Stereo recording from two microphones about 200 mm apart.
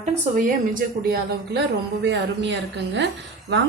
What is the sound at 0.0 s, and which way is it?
A woman's voice, 35° right (ahead or behind).